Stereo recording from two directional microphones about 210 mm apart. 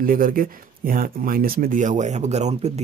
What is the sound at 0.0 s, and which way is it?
Speech, 40° right (ahead or behind).